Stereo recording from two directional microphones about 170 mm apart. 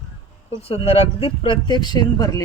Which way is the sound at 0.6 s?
35° left (ahead or behind).